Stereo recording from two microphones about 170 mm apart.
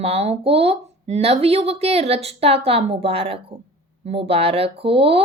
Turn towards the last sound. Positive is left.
turn(degrees=-35)  # may be behind; listen again after turning